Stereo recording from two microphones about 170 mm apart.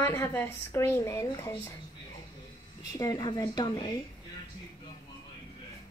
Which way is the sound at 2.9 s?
20° left (ahead or behind).